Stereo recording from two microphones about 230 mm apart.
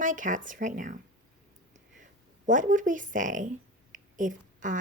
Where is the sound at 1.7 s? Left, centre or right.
Right.